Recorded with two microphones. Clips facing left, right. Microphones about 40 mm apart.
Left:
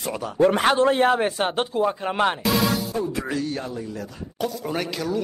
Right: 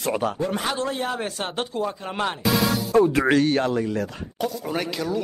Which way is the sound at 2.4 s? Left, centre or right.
Centre.